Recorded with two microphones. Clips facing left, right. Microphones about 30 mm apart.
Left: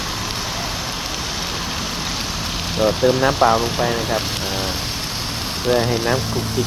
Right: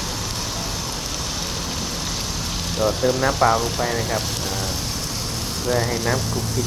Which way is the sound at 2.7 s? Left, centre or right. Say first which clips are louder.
Left 4 dB; left.